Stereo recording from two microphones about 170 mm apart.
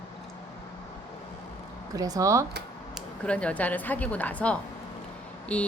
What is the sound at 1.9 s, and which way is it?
Speech, 20° right (ahead or behind).